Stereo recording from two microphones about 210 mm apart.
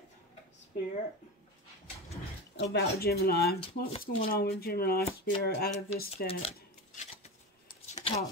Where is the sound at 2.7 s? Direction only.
50° left (ahead or behind).